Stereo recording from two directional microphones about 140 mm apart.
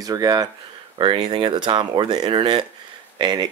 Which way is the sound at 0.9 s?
45° right (ahead or behind).